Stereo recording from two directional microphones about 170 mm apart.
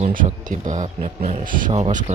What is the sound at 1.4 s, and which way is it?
Speech, 55° right (ahead or behind).